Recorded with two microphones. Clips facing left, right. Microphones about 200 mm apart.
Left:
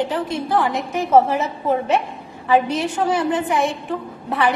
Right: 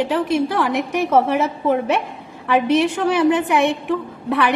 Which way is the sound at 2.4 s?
80° right.